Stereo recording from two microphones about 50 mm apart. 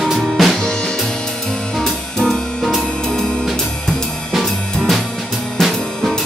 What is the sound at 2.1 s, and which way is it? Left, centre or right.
Music, centre.